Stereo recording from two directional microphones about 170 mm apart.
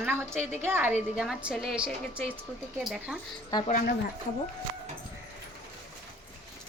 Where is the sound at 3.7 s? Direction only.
50° left (ahead or behind).